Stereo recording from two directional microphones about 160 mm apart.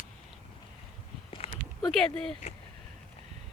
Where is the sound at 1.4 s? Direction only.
35° left (ahead or behind).